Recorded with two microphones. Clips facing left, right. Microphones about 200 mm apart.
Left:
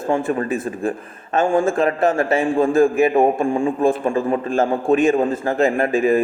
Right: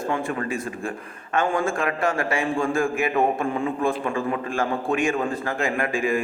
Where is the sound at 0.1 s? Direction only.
30° left (ahead or behind).